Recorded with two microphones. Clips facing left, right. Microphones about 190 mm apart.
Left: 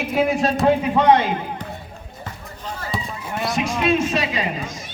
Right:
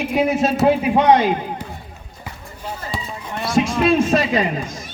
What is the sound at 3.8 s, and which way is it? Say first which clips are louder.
Speech: right 3 dB; 50° right (ahead or behind).